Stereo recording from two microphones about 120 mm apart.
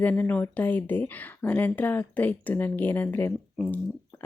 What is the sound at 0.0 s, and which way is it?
Speech, 15° left (ahead or behind).